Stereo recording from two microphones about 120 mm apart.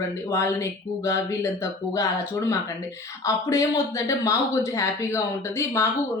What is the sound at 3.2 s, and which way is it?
Speech, 25° left (ahead or behind).